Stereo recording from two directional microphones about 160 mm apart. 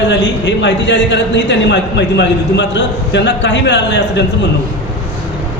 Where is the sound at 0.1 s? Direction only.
90° left.